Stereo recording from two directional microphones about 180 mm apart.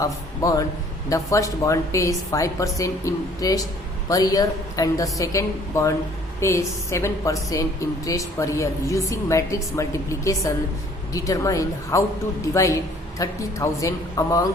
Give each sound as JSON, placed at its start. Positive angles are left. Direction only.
{"t": 0.0, "sound": "a woman's voice", "side_deg": 20}
{"t": 13.1, "sound": "speech", "side_deg": 20}